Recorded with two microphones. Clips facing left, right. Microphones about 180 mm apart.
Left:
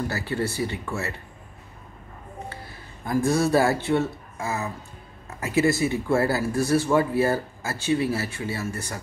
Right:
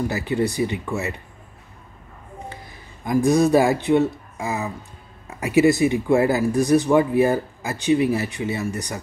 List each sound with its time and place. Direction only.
0.1 s speech: 15° right (ahead or behind)
2.5 s a man's voice: 15° right (ahead or behind)